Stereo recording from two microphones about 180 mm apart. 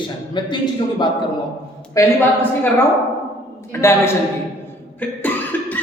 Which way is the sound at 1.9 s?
15° left (ahead or behind).